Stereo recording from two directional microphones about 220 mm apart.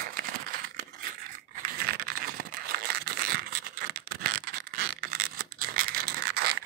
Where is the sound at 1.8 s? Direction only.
40° right (ahead or behind).